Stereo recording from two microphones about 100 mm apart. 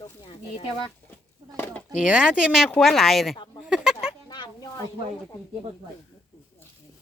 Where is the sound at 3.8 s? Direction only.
5° right (ahead or behind).